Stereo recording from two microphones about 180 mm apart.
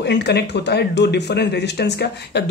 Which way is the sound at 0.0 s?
70° left (ahead or behind).